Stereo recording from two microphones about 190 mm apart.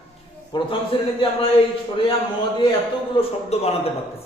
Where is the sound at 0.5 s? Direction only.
25° left (ahead or behind).